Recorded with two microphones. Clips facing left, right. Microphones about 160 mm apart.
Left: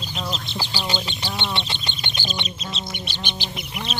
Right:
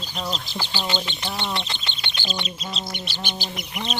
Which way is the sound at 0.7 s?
10° left (ahead or behind).